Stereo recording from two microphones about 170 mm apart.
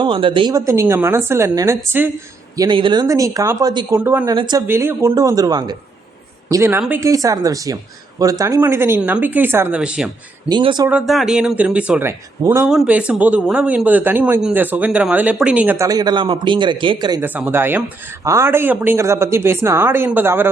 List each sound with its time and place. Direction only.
0.0 s speech: 30° right (ahead or behind)
0.5 s speech: 15° right (ahead or behind)
2.6 s speech: 30° right (ahead or behind)
4.0 s speech: 10° right (ahead or behind)
4.4 s speech: 25° right (ahead or behind)
4.6 s speech: 15° right (ahead or behind)
10.5 s speech: 25° right (ahead or behind)
10.8 s speech: 5° right (ahead or behind)
15.9 s speech: 25° right (ahead or behind)
17.2 s speech: 10° right (ahead or behind)